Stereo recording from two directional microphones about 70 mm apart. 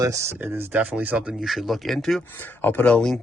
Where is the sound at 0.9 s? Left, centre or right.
Right.